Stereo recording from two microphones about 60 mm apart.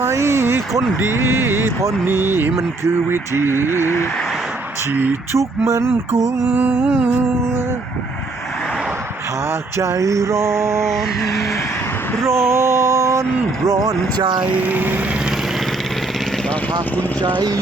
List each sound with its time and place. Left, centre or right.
0.0 s speech: right
0.7 s speech: centre
0.9 s speech: right
3.8 s a sound: left
5.3 s a sound: right
6.1 s mantra: centre
6.5 s speech: right
9.8 s a sound: right
12.5 s mantra: right
13.7 s speech: right
14.4 s speech: right